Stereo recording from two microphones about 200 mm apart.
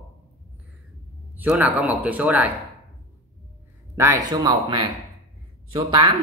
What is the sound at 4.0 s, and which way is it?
Speech, 15° right (ahead or behind).